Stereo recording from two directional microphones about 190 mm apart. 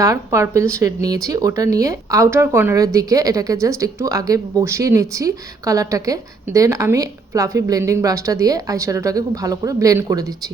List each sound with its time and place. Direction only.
0.0 s speech: 15° right (ahead or behind)